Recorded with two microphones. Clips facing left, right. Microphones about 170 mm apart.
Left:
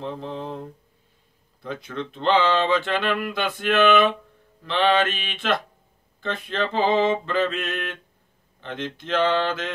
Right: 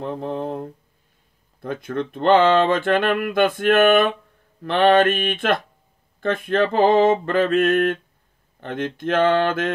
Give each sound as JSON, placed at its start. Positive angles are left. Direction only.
{"t": 0.0, "sound": "speech", "side_deg": -50}